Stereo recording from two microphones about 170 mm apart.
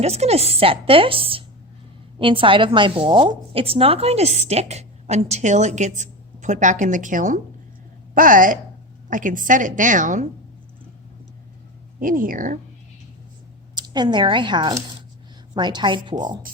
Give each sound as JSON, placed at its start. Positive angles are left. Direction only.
{"t": 0.0, "sound": "a woman's voice", "side_deg": -40}
{"t": 11.9, "sound": "a woman's voice", "side_deg": -55}
{"t": 13.7, "sound": "speech", "side_deg": -25}